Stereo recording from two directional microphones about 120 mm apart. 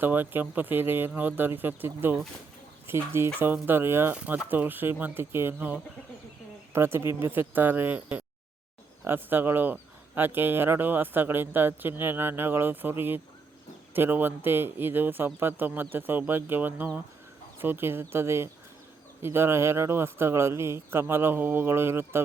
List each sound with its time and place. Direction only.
0.0 s a man's voice: 15° right (ahead or behind)
4.1 s a man's voice: 10° right (ahead or behind)